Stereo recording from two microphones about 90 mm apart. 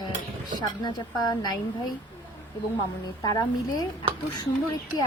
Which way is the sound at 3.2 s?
45° left (ahead or behind).